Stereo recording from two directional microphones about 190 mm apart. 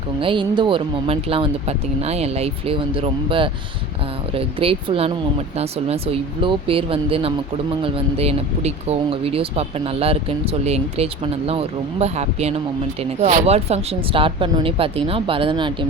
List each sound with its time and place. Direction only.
0.2 s speech: 25° right (ahead or behind)